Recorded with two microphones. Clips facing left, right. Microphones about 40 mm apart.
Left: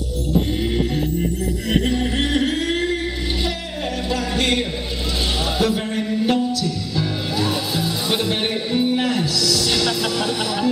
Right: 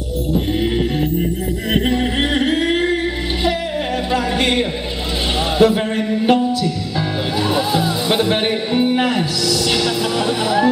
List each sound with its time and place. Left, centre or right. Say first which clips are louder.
1.7 s music: right 3 dB; right
4.1 s a sound: right 3 dB; right
5.6 s music: right 8 dB; right